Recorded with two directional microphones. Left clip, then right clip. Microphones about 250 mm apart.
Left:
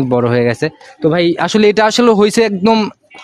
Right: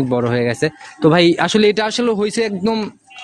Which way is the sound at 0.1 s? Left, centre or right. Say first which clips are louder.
Left 6 dB; left.